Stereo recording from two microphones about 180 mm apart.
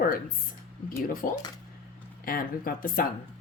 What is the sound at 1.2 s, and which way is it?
A woman's voice, 50° left (ahead or behind).